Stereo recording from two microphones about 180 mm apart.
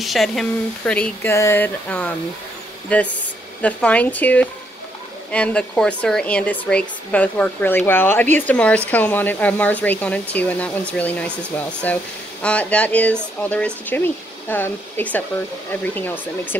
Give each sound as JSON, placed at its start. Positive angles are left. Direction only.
{"t": 0.0, "sound": "speech", "side_deg": 0}